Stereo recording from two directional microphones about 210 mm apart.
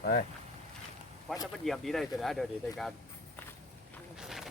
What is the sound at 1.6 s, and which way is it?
Speech, centre (ahead or behind).